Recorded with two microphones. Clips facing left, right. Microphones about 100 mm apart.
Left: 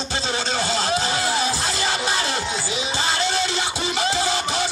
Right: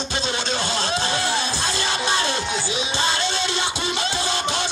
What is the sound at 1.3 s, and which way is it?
Music, 25° right (ahead or behind).